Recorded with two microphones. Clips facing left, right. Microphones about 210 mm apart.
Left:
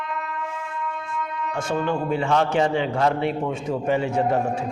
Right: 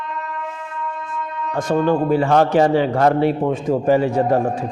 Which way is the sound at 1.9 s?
35° right (ahead or behind).